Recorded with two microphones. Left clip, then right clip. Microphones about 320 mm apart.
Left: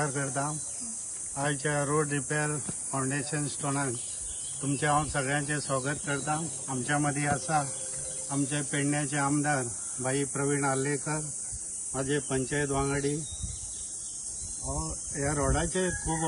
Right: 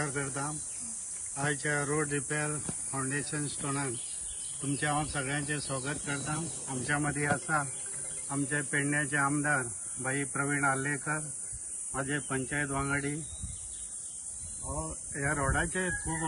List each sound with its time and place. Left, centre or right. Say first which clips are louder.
0.0 s speech: left 4 dB; centre
15.1 s speech: left 1 dB; centre